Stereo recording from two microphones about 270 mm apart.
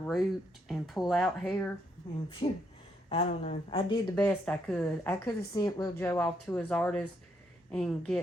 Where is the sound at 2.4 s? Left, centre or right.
Left.